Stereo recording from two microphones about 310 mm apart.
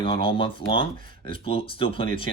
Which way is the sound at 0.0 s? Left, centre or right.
Centre.